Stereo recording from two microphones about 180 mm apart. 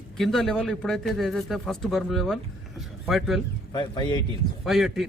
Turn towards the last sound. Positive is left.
turn(degrees=0)  # may be behind; listen again after turning